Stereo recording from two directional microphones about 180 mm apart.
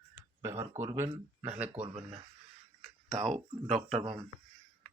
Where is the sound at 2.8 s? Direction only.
Centre (ahead or behind).